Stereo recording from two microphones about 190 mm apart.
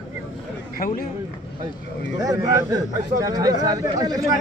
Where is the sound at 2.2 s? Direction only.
20° right (ahead or behind).